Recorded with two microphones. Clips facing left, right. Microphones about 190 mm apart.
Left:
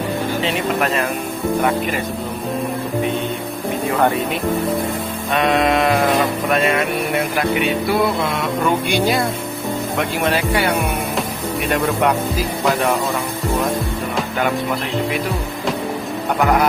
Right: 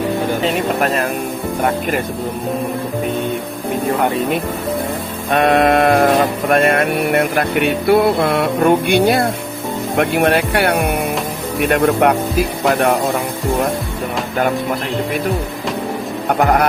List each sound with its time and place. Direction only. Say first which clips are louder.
0.4 s speech: right 1 dB; 40° right (ahead or behind)
5.3 s sheep: right 4 dB; 50° right (ahead or behind)
6.5 s a sound: right 5 dB; 55° right (ahead or behind)
16.4 s sheep: right 2 dB; 50° right (ahead or behind)